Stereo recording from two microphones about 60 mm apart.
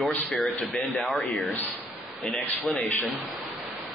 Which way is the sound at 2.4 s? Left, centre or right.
Left.